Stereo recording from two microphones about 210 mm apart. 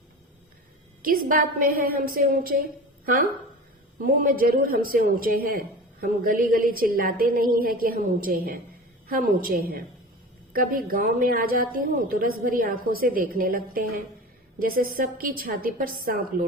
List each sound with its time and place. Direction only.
1.0 s speech: 40° right (ahead or behind)
3.9 s a woman's voice: 40° right (ahead or behind)